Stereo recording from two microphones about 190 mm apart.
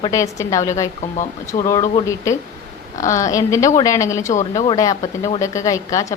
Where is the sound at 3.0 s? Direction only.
15° left (ahead or behind).